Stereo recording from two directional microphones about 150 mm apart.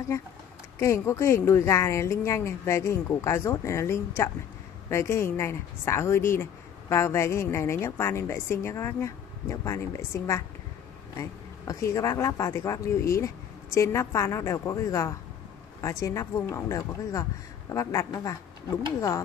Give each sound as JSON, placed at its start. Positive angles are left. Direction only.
{"t": 0.7, "sound": "a woman's voice", "side_deg": 20}